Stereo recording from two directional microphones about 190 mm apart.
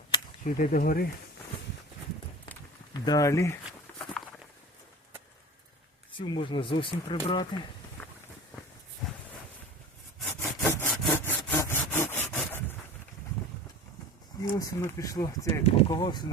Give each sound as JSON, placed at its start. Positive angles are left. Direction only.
{"t": 0.4, "sound": "speech", "side_deg": 45}
{"t": 2.9, "sound": "speech", "side_deg": 20}
{"t": 3.7, "sound": "walk", "side_deg": 5}
{"t": 6.1, "sound": "speech", "side_deg": 25}
{"t": 10.4, "sound": "sawing", "side_deg": 10}
{"t": 14.4, "sound": "speech", "side_deg": 20}